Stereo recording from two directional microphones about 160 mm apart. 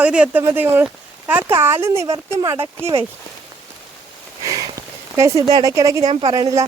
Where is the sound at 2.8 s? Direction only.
40° right (ahead or behind).